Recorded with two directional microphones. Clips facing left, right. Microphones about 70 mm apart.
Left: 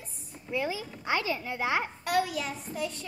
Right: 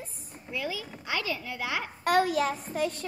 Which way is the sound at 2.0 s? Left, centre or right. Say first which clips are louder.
Right 4 dB; right.